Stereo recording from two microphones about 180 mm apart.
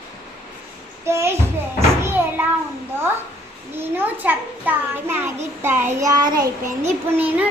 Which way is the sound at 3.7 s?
10° right (ahead or behind).